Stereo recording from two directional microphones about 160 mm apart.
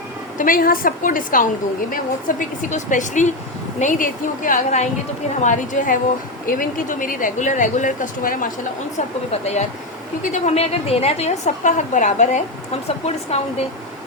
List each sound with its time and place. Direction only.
0.3 s a woman's voice: 60° left (ahead or behind)
9.3 s a woman's voice: 45° left (ahead or behind)